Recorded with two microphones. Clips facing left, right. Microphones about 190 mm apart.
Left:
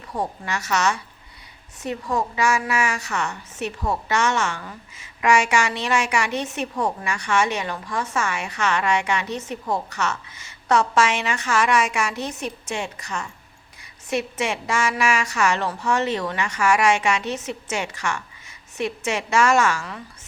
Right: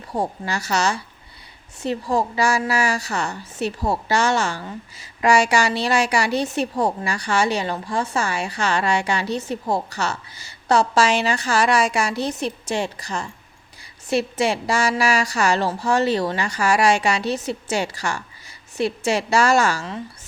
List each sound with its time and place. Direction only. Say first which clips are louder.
0.1 s a woman's voice: right 3 dB; 30° right (ahead or behind)